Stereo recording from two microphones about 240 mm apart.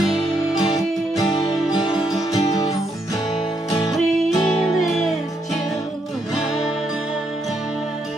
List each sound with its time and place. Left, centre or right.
0.0 s music: centre
0.7 s music: centre
2.3 s guitar: centre
3.7 s music: centre